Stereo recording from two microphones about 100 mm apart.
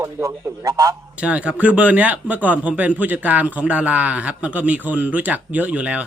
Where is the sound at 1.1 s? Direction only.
10° right (ahead or behind).